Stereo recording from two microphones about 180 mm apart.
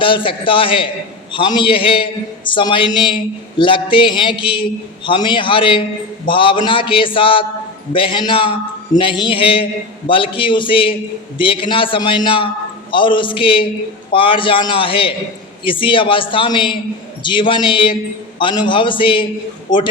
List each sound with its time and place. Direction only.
0.0 s a man's voice: 30° left (ahead or behind)